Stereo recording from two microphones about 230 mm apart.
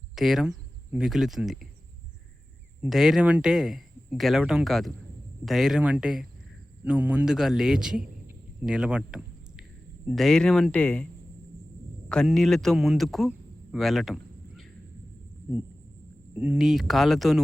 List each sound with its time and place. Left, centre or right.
0.2 s speech: centre
2.8 s speech: centre